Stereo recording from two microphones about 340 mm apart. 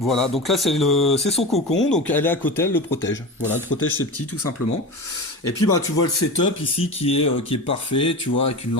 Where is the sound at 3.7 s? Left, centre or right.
Left.